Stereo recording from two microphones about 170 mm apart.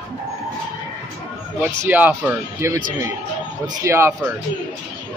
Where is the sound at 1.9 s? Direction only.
10° right (ahead or behind).